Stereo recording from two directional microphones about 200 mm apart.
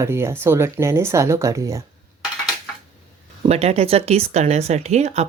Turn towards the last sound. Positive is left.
turn(degrees=-35)  # may be behind; listen again after turning